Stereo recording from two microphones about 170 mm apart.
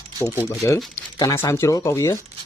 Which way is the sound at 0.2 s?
10° left (ahead or behind).